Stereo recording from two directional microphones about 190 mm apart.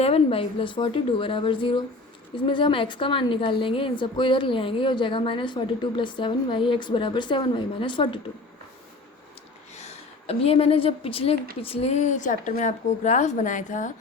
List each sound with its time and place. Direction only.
0.0 s a woman's voice: 30° left (ahead or behind)
9.7 s a woman's voice: 35° left (ahead or behind)